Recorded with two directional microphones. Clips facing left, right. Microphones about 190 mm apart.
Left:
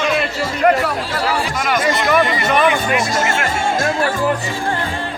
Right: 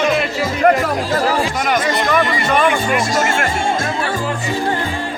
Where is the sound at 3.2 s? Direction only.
50° right (ahead or behind).